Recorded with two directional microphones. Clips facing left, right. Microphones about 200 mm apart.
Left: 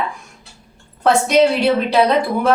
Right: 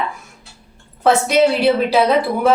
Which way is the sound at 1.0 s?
5° right (ahead or behind).